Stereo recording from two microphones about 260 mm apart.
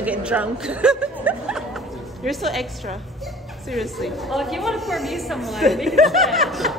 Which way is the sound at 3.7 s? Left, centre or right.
Centre.